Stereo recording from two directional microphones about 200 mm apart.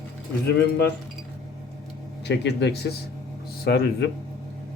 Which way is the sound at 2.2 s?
60° left (ahead or behind).